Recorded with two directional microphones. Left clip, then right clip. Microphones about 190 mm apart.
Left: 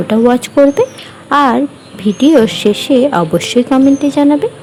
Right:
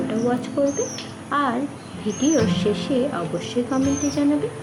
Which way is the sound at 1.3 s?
55° left (ahead or behind).